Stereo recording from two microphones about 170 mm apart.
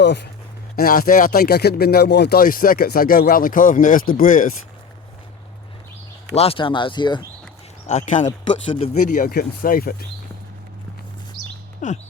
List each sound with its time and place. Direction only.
0.0 s speech: 85° left
0.8 s speech: 60° left (ahead or behind)
6.3 s speech: 35° left (ahead or behind)
7.9 s speech: 45° left (ahead or behind)
8.4 s speech: 35° left (ahead or behind); by 10.1 s 60° left (ahead or behind)
11.8 s speech: 50° left (ahead or behind)